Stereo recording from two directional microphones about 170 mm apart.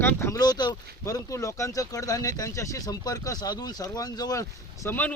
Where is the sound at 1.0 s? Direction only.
20° left (ahead or behind).